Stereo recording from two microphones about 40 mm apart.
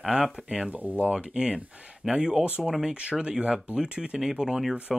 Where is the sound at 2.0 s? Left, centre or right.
Centre.